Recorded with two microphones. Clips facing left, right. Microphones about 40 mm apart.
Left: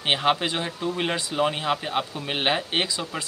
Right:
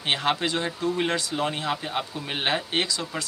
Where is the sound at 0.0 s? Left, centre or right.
Centre.